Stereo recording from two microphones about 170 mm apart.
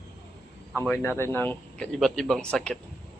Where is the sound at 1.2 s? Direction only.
10° left (ahead or behind).